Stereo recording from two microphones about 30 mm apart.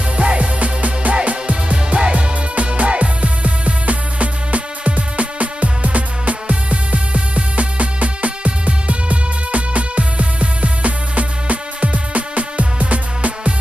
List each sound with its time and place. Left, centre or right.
0.2 s music: right